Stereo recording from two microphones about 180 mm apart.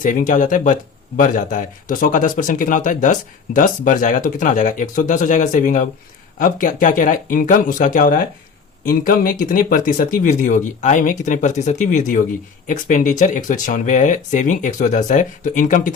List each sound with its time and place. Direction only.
0.0 s speech: 45° left (ahead or behind)